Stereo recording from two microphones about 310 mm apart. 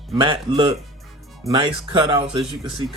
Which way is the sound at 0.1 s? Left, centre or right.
Centre.